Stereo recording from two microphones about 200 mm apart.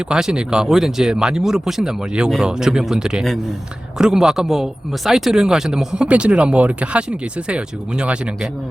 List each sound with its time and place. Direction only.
0.1 s speech: 5° right (ahead or behind)